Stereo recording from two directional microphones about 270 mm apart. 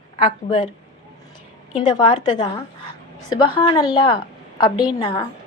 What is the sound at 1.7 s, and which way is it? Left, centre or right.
A woman's voice, centre.